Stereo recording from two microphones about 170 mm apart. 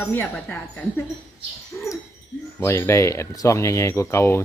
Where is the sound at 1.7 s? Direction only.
15° left (ahead or behind).